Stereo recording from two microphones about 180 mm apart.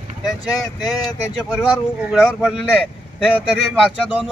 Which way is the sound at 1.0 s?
Centre (ahead or behind).